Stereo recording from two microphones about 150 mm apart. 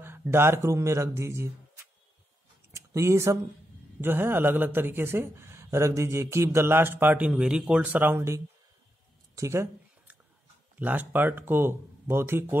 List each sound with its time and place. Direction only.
0.0 s speech: 15° right (ahead or behind)
2.7 s speech: 20° right (ahead or behind)
9.3 s a sound: 20° right (ahead or behind)
10.8 s speech: 10° right (ahead or behind)